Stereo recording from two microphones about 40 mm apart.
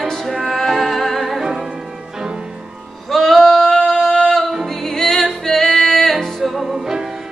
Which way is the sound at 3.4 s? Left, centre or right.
Centre.